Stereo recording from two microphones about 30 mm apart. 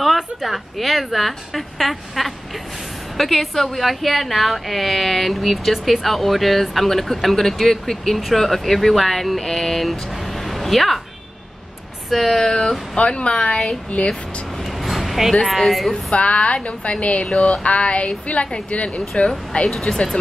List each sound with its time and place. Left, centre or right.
0.0 s a woman's voice: centre
12.3 s speech: centre
13.2 s speech: left
14.8 s a sound: centre
15.4 s a woman's voice: centre
16.2 s speech: left
19.7 s speech: centre